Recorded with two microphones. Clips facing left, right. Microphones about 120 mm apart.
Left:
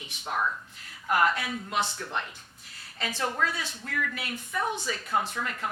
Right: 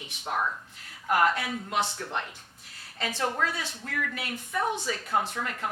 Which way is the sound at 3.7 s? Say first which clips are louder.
Even; 40° right (ahead or behind).